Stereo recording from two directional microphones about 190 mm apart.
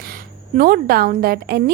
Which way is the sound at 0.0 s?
50° right (ahead or behind).